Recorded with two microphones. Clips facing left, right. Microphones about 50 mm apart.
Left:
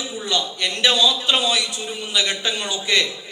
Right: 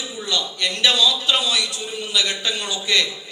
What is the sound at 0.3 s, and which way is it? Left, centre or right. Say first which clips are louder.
A man's voice: even; left.